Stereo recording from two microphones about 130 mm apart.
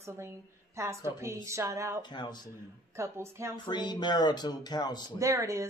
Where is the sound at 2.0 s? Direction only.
35° left (ahead or behind).